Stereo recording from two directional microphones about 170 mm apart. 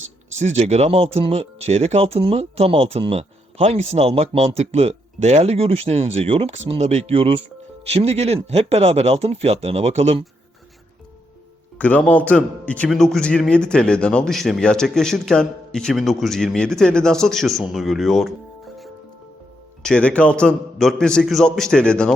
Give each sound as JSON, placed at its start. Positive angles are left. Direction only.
{"t": 0.3, "sound": "speech", "side_deg": -40}
{"t": 11.8, "sound": "a man's voice", "side_deg": 10}
{"t": 19.8, "sound": "a man's voice", "side_deg": 5}